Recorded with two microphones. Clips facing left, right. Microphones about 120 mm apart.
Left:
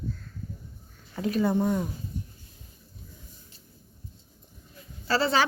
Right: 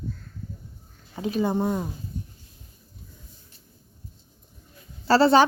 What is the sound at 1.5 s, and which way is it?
Speech, 30° right (ahead or behind).